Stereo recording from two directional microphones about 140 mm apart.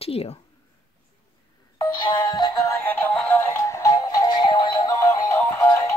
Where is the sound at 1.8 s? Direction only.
35° left (ahead or behind).